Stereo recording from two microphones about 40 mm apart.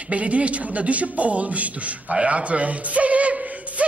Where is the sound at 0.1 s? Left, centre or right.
Right.